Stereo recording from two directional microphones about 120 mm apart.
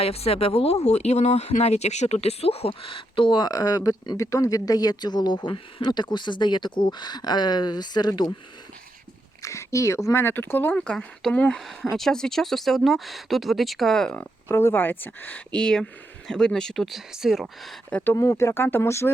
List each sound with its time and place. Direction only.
0.0 s speech: 55° left (ahead or behind); by 8.3 s 35° left (ahead or behind)
9.4 s speech: 25° left (ahead or behind); by 17.7 s centre (ahead or behind)
17.9 s speech: 15° left (ahead or behind)